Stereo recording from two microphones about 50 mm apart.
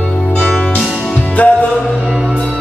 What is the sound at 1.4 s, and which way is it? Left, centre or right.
Music, left.